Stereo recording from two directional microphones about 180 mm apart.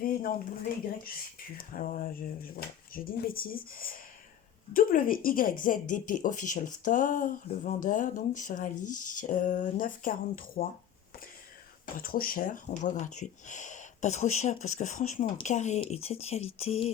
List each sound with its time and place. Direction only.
0.0 s a sound: 50° left (ahead or behind)
1.0 s speech: 50° left (ahead or behind)
11.9 s speech: 55° left (ahead or behind); by 16.9 s 35° left (ahead or behind)